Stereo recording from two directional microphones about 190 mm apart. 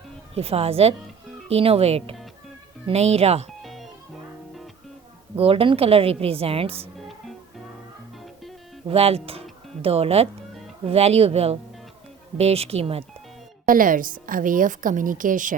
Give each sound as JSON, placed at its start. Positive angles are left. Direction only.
{"t": 0.3, "sound": "a woman's voice", "side_deg": -30}
{"t": 3.6, "sound": "music", "side_deg": 0}
{"t": 5.4, "sound": "a woman's voice", "side_deg": -30}
{"t": 8.9, "sound": "a woman's voice", "side_deg": -30}
{"t": 13.7, "sound": "a woman's voice", "side_deg": -45}